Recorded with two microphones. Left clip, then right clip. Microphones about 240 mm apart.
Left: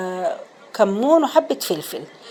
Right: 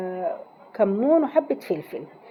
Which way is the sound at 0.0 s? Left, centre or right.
Centre.